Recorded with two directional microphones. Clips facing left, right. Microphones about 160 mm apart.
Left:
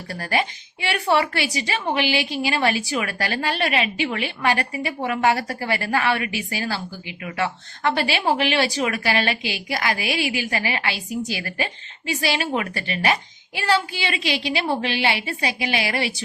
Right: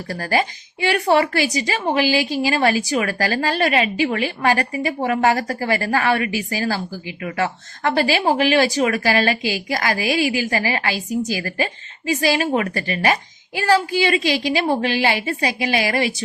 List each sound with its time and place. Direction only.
0.1 s a woman's voice: 40° right (ahead or behind)